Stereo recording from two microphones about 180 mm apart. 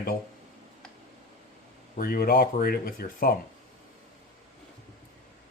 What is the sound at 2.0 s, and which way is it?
Speech, 55° left (ahead or behind).